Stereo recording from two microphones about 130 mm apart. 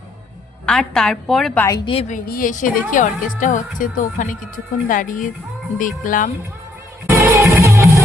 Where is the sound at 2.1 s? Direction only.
80° left.